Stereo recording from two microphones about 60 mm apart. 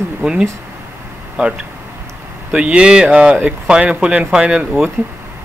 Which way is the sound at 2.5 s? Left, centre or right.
Centre.